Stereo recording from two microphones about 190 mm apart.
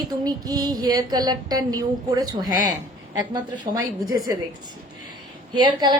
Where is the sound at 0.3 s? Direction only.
20° right (ahead or behind).